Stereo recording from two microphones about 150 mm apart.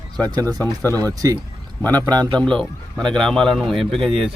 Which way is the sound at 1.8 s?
10° left (ahead or behind).